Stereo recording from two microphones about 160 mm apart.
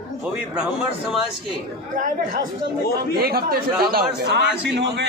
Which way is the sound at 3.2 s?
70° right (ahead or behind).